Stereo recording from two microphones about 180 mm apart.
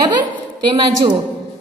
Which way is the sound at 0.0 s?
25° right (ahead or behind).